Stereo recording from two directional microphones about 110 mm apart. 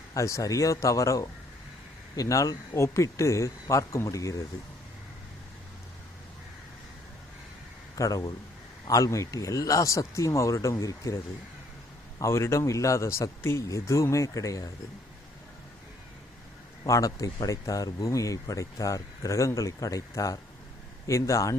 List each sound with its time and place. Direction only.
0.1 s speech: 30° left (ahead or behind)
7.9 s a man's voice: 30° left (ahead or behind)
12.2 s speech: 25° left (ahead or behind)
16.8 s speech: 30° left (ahead or behind)